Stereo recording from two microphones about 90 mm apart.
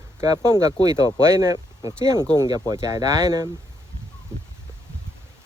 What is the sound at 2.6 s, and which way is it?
Speech, 45° right (ahead or behind).